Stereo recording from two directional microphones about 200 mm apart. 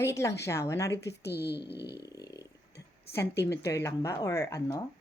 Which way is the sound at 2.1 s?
20° left (ahead or behind).